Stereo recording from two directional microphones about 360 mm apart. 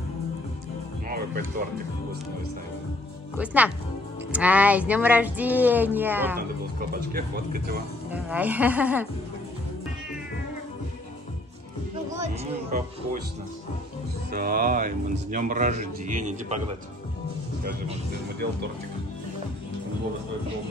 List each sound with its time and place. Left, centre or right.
1.0 s music: right
3.3 s speech: centre
6.9 s speech: right
8.1 s speech: centre
12.1 s speech: centre
14.3 s speech: right